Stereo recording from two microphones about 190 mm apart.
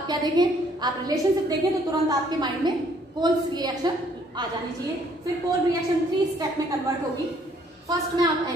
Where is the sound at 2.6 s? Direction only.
20° right (ahead or behind).